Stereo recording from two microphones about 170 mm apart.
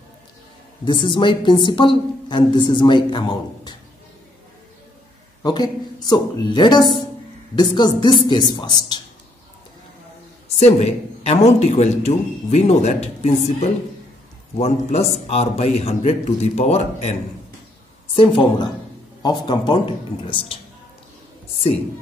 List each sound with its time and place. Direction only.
0.8 s a woman's voice: 30° left (ahead or behind)
5.4 s a woman's voice: 25° left (ahead or behind)
10.6 s a woman's voice: 40° left (ahead or behind)